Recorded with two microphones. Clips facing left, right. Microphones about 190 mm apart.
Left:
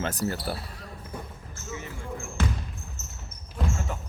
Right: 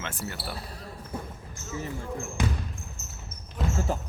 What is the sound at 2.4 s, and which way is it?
Basketball bounce, 15° right (ahead or behind).